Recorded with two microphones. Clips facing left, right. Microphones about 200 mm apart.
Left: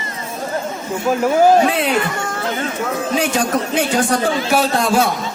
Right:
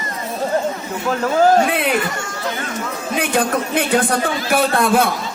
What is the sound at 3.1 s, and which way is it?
Speech, 55° right (ahead or behind).